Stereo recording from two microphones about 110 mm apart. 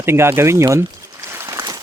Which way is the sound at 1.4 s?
30° right (ahead or behind).